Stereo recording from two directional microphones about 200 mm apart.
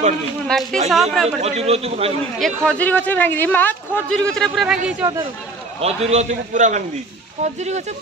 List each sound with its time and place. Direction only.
0.5 s speech: 5° left (ahead or behind)
1.4 s a man's voice: 30° right (ahead or behind)
2.3 s speech: 5° left (ahead or behind)
5.8 s a man's voice: 30° right (ahead or behind)